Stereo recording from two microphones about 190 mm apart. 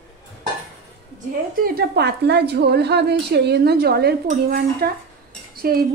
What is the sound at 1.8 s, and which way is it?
A woman's voice, 60° right (ahead or behind).